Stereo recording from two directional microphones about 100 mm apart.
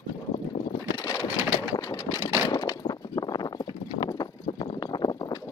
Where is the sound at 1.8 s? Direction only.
35° left (ahead or behind).